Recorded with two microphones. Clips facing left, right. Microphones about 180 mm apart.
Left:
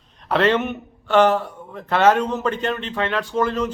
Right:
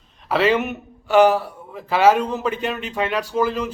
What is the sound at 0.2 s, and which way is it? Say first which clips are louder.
A man's voice: even; 5° right (ahead or behind).